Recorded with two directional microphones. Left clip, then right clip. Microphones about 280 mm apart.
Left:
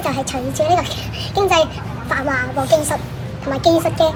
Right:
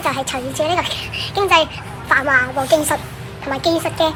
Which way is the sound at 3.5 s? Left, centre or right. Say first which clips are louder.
Left 3 dB; centre.